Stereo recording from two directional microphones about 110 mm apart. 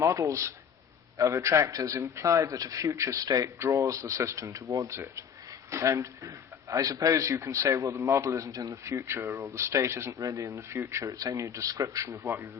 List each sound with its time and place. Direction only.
0.0 s a man's voice: 30° right (ahead or behind)